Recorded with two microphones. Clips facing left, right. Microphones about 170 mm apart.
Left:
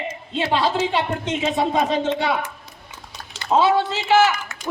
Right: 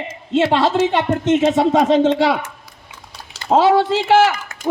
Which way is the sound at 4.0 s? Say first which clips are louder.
Right 3 dB; 55° right (ahead or behind).